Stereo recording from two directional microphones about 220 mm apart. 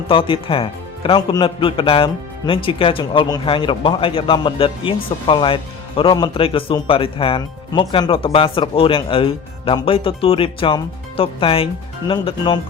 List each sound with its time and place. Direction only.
0.1 s speech: 25° left (ahead or behind)